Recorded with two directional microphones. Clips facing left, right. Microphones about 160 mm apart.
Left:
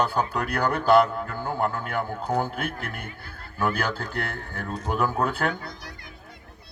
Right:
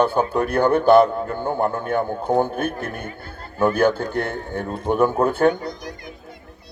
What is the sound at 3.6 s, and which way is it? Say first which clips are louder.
A man's voice: right 9 dB; 25° right (ahead or behind).